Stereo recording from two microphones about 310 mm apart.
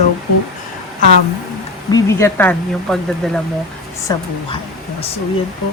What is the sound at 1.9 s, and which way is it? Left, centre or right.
Speech, centre.